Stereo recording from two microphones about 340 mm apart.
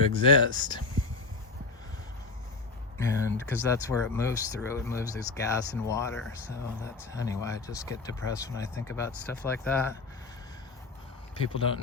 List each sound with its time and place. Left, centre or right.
0.2 s speech: centre
3.0 s speech: centre
11.4 s speech: centre